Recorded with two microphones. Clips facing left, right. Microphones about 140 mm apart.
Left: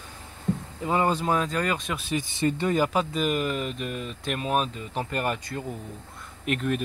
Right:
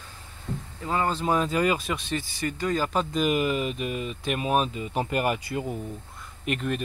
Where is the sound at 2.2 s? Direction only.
25° left (ahead or behind).